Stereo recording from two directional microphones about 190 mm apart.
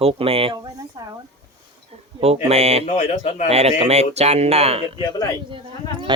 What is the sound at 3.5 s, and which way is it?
Speech, 35° right (ahead or behind).